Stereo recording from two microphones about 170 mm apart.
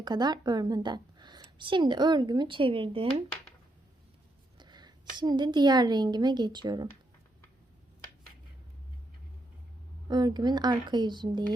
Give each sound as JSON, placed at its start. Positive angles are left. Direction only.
{"t": 0.0, "sound": "speech", "side_deg": -25}
{"t": 4.5, "sound": "a woman's voice", "side_deg": -25}
{"t": 10.1, "sound": "speech", "side_deg": -25}